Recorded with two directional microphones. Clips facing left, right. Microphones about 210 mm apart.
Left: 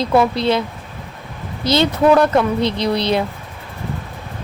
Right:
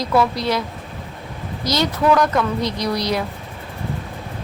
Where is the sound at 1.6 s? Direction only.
25° left (ahead or behind).